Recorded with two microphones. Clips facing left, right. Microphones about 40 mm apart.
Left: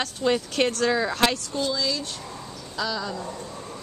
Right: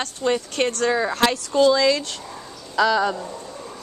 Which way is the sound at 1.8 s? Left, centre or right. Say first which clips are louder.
Right 8 dB; right.